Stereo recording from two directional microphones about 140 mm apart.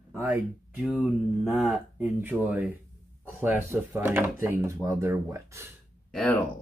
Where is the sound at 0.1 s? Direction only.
10° right (ahead or behind).